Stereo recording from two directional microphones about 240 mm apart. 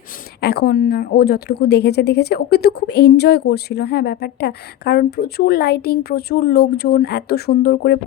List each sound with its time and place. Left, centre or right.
0.4 s speech: left